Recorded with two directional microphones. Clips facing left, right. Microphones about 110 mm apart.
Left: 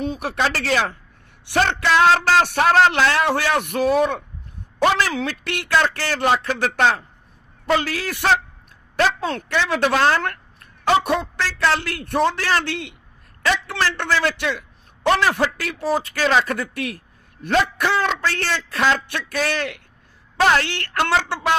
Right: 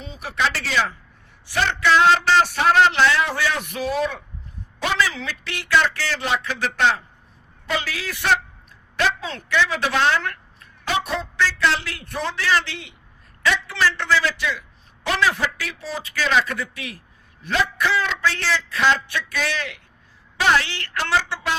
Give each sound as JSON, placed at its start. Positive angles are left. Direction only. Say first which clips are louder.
{"t": 0.0, "sound": "a sound", "louder": "left 10 dB", "side_deg": 60}
{"t": 0.3, "sound": "a man's voice", "louder": "left 1 dB", "side_deg": 45}
{"t": 1.5, "sound": "speech", "louder": "left 3 dB", "side_deg": 40}
{"t": 2.4, "sound": "speech", "louder": "left 2 dB", "side_deg": 60}
{"t": 2.7, "sound": "a man's voice", "louder": "even", "side_deg": 45}
{"t": 9.9, "sound": "a sound", "louder": "left 2 dB", "side_deg": 50}
{"t": 11.5, "sound": "a man's voice", "louder": "left 2 dB", "side_deg": 60}